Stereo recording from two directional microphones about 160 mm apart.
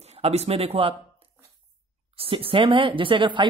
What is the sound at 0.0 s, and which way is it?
Speech, 40° right (ahead or behind).